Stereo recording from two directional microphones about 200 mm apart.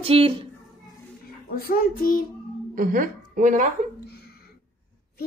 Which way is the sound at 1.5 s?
45° left (ahead or behind).